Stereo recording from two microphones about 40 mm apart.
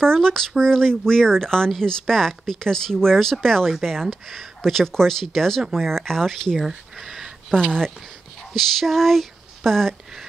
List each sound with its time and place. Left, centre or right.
0.0 s speech: centre
7.5 s speech: left
8.5 s a sound: centre